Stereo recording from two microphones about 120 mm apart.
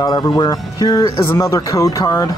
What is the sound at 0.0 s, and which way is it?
Speech, 35° left (ahead or behind).